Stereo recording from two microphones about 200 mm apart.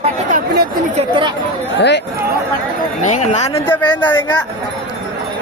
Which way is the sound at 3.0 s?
35° left (ahead or behind).